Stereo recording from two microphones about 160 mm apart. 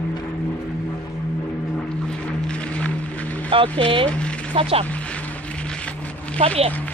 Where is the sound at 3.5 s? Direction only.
35° right (ahead or behind).